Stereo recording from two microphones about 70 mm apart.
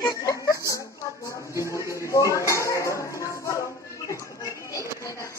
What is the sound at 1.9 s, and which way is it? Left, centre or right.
Dishes, left.